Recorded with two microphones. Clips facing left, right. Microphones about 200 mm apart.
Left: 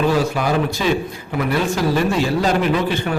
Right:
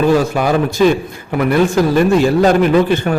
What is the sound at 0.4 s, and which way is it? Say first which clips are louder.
Speech: right 6 dB; 50° right (ahead or behind).